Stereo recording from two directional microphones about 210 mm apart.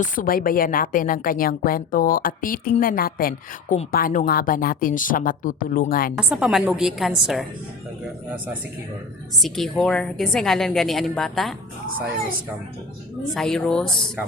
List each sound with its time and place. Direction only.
0.0 s a woman's voice: 40° left (ahead or behind)
6.1 s a woman's voice: 5° right (ahead or behind)
9.4 s a woman's voice: centre (ahead or behind)
13.3 s a woman's voice: 5° left (ahead or behind)